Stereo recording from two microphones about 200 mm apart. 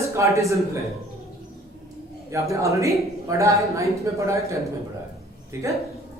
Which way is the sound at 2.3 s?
15° right (ahead or behind).